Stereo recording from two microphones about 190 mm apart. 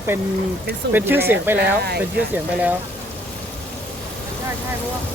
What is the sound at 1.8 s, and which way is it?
Speech, 60° right (ahead or behind).